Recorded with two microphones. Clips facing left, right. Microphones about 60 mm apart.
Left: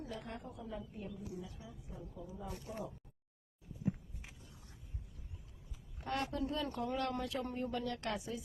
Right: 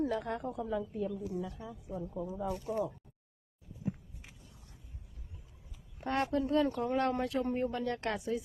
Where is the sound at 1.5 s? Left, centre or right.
Right.